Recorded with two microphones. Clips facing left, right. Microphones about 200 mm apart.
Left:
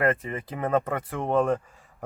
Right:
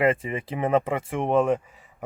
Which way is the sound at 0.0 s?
20° right (ahead or behind).